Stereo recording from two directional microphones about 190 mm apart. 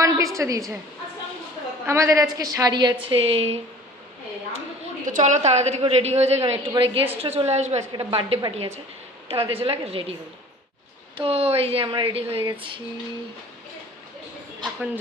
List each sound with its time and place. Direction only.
0.0 s a woman's voice: 15° right (ahead or behind)
1.9 s a woman's voice: 15° right (ahead or behind)
5.0 s a woman's voice: 40° right (ahead or behind)
11.1 s a woman's voice: 30° right (ahead or behind)